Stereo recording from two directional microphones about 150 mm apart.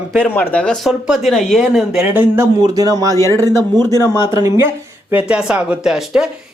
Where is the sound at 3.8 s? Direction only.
20° left (ahead or behind).